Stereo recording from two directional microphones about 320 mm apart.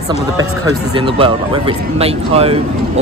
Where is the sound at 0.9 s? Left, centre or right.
Centre.